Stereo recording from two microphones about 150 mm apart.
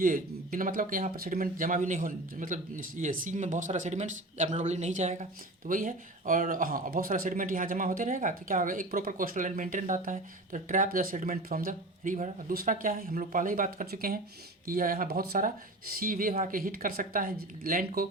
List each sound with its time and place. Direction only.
0.0 s speech: 65° right (ahead or behind)